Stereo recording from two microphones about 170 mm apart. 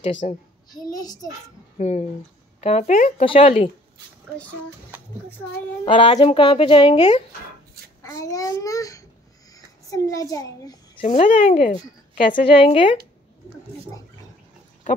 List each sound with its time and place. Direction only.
0.0 s speech: 45° left (ahead or behind)
0.7 s a child's voice: 20° left (ahead or behind)
1.8 s speech: 45° left (ahead or behind)
3.3 s speech: 35° left (ahead or behind)
5.9 s speech: 30° left (ahead or behind)
8.0 s a child's voice: 20° left (ahead or behind)
11.0 s speech: 45° left (ahead or behind)
12.4 s speech: 30° left (ahead or behind)